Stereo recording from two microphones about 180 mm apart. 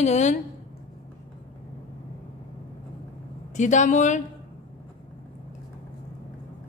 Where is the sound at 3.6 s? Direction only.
40° left (ahead or behind).